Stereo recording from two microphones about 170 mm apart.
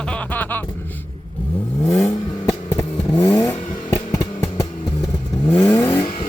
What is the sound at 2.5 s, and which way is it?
Vehicle, 20° left (ahead or behind).